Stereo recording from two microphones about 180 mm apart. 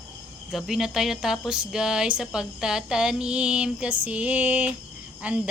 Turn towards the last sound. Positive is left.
turn(degrees=-5)  # may be behind; listen again after turning